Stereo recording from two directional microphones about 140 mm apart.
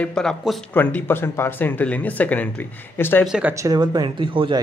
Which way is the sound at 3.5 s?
25° right (ahead or behind).